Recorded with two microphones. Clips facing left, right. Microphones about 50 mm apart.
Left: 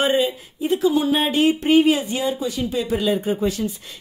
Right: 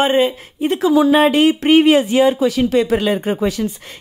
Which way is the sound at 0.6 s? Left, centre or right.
Right.